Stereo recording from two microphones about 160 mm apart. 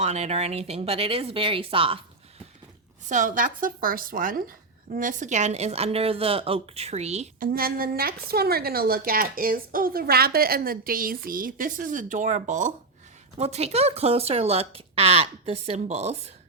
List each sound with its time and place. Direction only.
0.0 s speech: 45° right (ahead or behind)
3.1 s a woman's voice: 55° right (ahead or behind)
7.3 s a woman's voice: 65° right (ahead or behind)
13.4 s speech: 40° right (ahead or behind)